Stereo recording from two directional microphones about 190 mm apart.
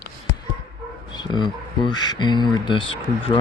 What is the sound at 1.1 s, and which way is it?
Speech, 20° left (ahead or behind).